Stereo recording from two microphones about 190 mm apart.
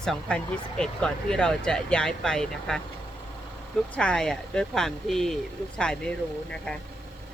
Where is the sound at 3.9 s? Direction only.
5° left (ahead or behind).